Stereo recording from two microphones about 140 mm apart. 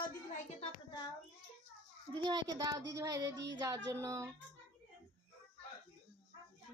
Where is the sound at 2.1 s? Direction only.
30° right (ahead or behind).